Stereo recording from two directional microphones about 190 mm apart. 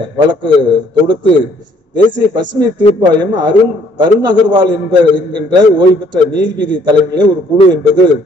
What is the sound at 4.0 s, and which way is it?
A man's voice, 25° right (ahead or behind).